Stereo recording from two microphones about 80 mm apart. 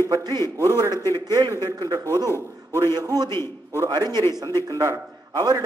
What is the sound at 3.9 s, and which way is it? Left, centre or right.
Speech, right.